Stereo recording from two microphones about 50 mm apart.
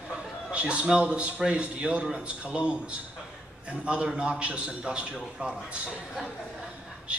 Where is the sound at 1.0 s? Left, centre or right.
Right.